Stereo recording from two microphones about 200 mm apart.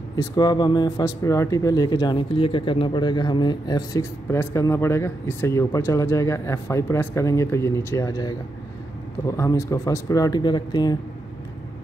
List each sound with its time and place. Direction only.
0.1 s speech: 20° left (ahead or behind)